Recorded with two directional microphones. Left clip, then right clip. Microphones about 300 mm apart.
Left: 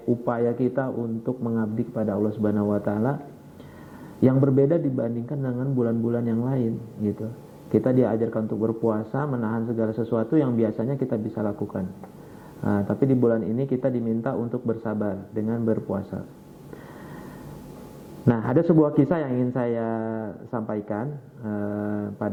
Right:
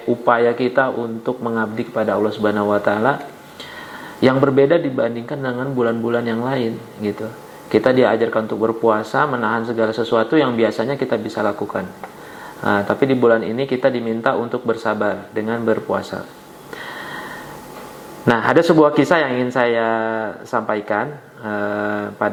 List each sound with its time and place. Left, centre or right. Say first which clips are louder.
0.3 s speech: right 11 dB; centre
0.9 s speech: right 7 dB; right
8.4 s speech: right 7 dB; right
8.9 s speech: right 10 dB; centre
18.3 s speech: right 8 dB; centre